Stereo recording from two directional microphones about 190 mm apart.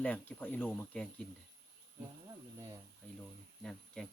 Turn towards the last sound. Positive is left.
turn(degrees=0)  # may be behind; listen again after turning